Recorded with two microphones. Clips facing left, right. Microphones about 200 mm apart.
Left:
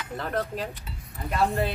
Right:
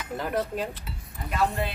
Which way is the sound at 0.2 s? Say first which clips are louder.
Right 1 dB; 10° right (ahead or behind).